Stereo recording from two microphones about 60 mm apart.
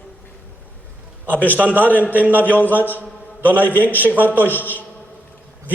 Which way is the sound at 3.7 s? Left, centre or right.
Left.